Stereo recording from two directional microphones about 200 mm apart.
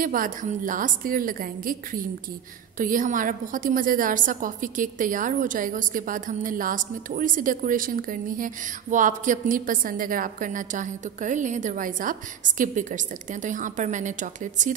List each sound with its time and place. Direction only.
0.0 s a woman's voice: 45° right (ahead or behind)